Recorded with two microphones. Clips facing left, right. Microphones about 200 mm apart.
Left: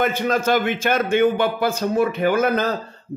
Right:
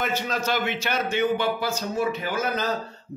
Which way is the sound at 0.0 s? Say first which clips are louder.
Left 7 dB; 55° left (ahead or behind).